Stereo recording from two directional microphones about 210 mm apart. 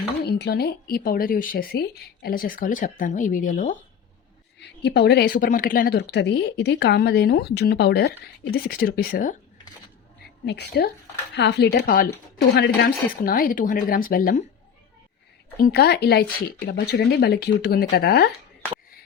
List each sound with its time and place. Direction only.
0.3 s speech: 50° left (ahead or behind)
4.6 s speech: 55° left (ahead or behind)
10.4 s speech: 55° left (ahead or behind)
15.6 s speech: 50° left (ahead or behind)